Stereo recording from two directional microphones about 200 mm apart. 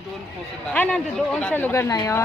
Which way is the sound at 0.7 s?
5° left (ahead or behind).